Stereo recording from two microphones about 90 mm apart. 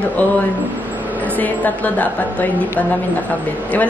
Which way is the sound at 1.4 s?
20° left (ahead or behind).